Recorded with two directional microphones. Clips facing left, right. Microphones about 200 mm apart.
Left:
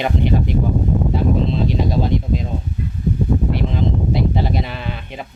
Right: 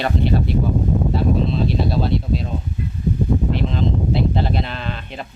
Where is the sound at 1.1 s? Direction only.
15° left (ahead or behind).